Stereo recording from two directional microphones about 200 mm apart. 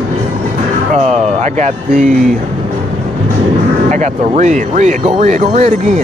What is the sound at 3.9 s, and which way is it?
Speech, 35° right (ahead or behind).